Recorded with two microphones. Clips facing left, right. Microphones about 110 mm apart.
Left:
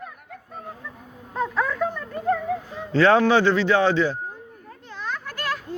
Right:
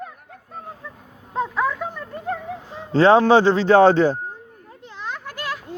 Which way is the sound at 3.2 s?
35° right (ahead or behind).